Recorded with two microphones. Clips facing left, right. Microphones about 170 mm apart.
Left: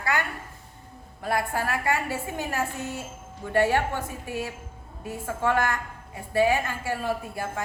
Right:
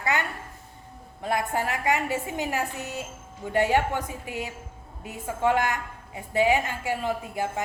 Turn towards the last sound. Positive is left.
turn(degrees=-20)  # may be behind; listen again after turning